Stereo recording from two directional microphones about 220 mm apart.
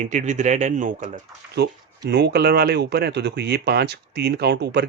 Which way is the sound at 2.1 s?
50° right (ahead or behind).